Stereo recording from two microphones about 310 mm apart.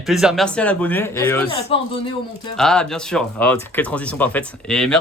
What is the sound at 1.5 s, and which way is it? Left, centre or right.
Speech, centre.